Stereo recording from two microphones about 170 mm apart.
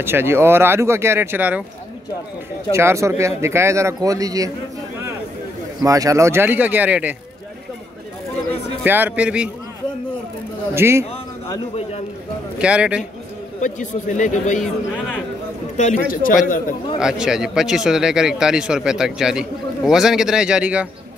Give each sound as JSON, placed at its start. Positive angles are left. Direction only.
{"t": 0.0, "sound": "a man's voice", "side_deg": -15}
{"t": 2.7, "sound": "a man's voice", "side_deg": -15}
{"t": 5.8, "sound": "a man's voice", "side_deg": -20}
{"t": 8.8, "sound": "a man's voice", "side_deg": -10}
{"t": 10.7, "sound": "a man's voice", "side_deg": -15}
{"t": 12.5, "sound": "a man's voice", "side_deg": -5}
{"t": 13.6, "sound": "speech", "side_deg": 45}
{"t": 16.1, "sound": "a man's voice", "side_deg": 55}
{"t": 17.0, "sound": "a man's voice", "side_deg": -5}